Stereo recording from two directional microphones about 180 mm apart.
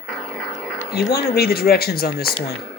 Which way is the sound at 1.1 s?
60° left (ahead or behind).